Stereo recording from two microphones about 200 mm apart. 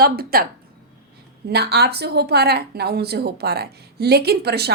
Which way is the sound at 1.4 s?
55° right (ahead or behind).